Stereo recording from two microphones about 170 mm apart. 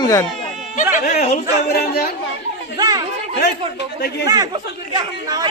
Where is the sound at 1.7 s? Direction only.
70° left (ahead or behind).